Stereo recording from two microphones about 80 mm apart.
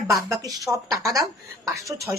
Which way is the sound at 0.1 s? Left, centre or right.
Right.